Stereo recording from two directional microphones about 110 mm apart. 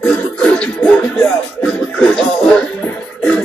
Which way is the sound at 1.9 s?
10° left (ahead or behind).